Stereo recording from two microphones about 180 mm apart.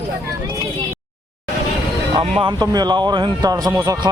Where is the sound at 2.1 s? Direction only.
30° right (ahead or behind).